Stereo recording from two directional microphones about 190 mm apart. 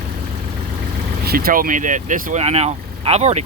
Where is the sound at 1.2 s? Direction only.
50° right (ahead or behind).